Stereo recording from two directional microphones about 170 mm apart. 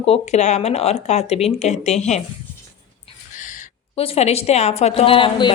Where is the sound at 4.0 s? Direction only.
35° left (ahead or behind).